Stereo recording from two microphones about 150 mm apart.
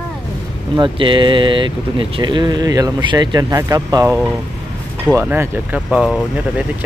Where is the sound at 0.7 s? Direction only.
35° right (ahead or behind).